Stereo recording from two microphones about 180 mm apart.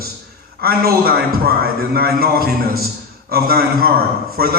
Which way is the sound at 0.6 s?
60° right (ahead or behind).